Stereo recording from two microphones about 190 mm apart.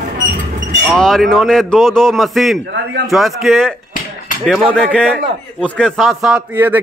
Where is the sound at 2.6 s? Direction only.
65° right (ahead or behind).